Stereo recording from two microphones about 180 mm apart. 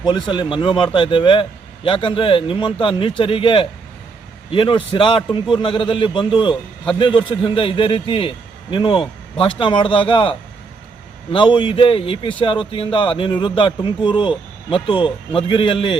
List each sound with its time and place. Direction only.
0.0 s a man's voice: 25° left (ahead or behind)